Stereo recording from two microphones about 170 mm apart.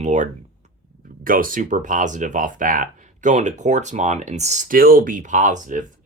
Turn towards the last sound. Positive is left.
turn(degrees=-50)  # may be behind; listen again after turning